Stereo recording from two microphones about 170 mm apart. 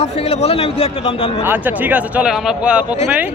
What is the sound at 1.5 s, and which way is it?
Speech, 10° right (ahead or behind).